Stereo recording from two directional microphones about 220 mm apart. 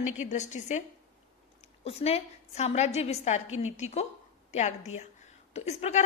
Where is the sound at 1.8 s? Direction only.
25° left (ahead or behind).